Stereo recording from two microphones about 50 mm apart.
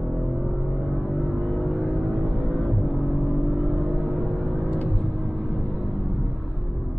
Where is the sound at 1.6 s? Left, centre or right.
Left.